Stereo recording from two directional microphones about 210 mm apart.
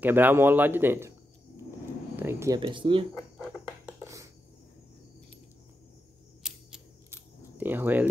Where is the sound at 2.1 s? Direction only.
10° right (ahead or behind).